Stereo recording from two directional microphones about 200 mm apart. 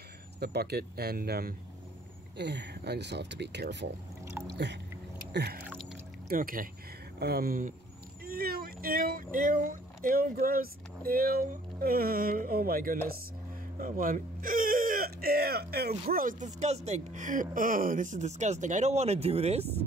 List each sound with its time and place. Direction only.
0.4 s speech: 55° right (ahead or behind)
4.2 s speech: 15° right (ahead or behind)
5.3 s biting: 55° right (ahead or behind)
6.2 s speech: 45° right (ahead or behind)